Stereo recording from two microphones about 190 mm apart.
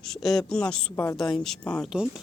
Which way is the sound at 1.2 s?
Centre (ahead or behind).